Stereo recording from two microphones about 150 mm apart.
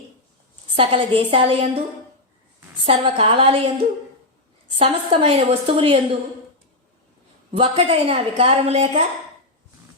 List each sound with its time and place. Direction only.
0.8 s a woman's voice: 40° right (ahead or behind)
2.8 s a woman's voice: 40° right (ahead or behind)
4.8 s a woman's voice: 40° right (ahead or behind)
7.8 s a woman's voice: 40° right (ahead or behind)